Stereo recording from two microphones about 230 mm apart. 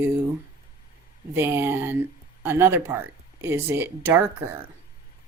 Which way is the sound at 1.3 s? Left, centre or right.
Centre.